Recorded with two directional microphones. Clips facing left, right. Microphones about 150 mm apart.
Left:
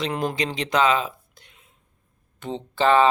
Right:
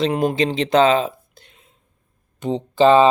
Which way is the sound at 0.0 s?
25° right (ahead or behind).